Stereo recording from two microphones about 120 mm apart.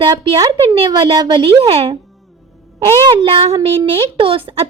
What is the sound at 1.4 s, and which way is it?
Speech, 55° right (ahead or behind).